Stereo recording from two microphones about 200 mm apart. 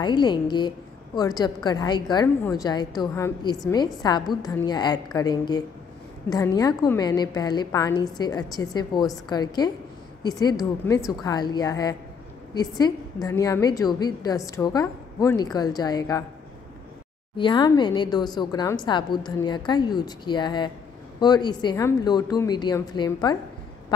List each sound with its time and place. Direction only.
0.0 s a woman's voice: 20° left (ahead or behind)
11.0 s a woman's voice: centre (ahead or behind)
11.2 s a woman's voice: 20° left (ahead or behind)
17.4 s a woman's voice: 25° left (ahead or behind)